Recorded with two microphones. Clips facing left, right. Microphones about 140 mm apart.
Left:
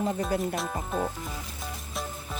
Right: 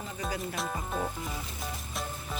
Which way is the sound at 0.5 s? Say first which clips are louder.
Left 3 dB; centre (ahead or behind).